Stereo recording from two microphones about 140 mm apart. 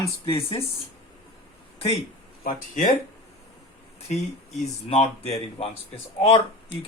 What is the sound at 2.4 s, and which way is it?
Speech, 65° left (ahead or behind).